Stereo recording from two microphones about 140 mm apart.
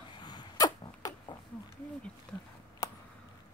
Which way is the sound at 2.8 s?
25° left (ahead or behind).